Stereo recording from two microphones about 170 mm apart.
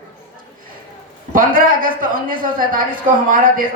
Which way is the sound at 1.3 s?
55° right (ahead or behind).